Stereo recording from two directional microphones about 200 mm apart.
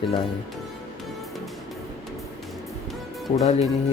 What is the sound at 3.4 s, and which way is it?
Speech, 35° left (ahead or behind).